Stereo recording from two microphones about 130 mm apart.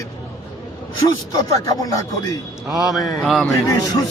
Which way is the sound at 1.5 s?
25° left (ahead or behind).